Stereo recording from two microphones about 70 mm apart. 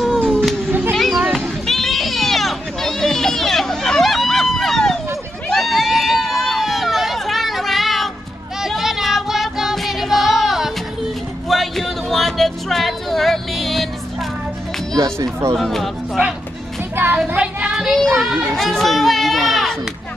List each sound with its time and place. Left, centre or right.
0.0 s cat: centre
0.7 s children playing: right
0.9 s children playing: centre
1.7 s a sound: centre
8.5 s music: centre
11.4 s a sound: centre
15.5 s speech: centre
17.4 s child singing: centre
17.9 s a sound: centre